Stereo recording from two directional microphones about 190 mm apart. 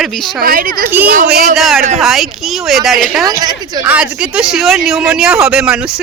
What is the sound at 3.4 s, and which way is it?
Speech, 20° right (ahead or behind).